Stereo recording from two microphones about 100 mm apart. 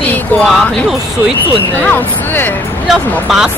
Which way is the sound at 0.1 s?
10° left (ahead or behind).